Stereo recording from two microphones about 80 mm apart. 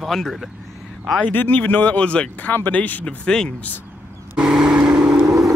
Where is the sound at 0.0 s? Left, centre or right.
Centre.